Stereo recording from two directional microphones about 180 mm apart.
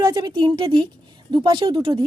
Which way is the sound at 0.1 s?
20° right (ahead or behind).